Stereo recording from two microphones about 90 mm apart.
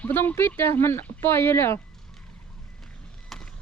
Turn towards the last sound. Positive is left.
turn(degrees=5)  # may be behind; listen again after turning